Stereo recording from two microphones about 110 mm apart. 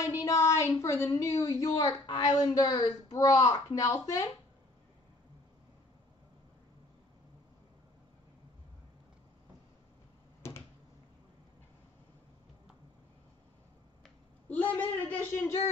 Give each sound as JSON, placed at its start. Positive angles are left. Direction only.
{"t": 0.0, "sound": "a woman's voice", "side_deg": 30}
{"t": 10.4, "sound": "a sound", "side_deg": 25}
{"t": 14.5, "sound": "a woman's voice", "side_deg": 15}